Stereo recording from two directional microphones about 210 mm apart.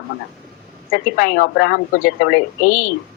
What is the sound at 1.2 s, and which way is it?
Speech, 45° left (ahead or behind).